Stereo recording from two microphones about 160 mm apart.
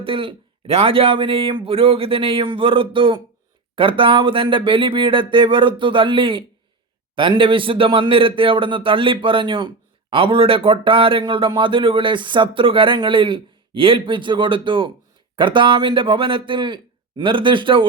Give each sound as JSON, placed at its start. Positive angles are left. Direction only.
{"t": 0.0, "sound": "a man's voice", "side_deg": -35}